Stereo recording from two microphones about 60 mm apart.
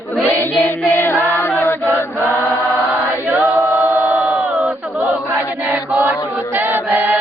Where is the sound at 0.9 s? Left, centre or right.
Left.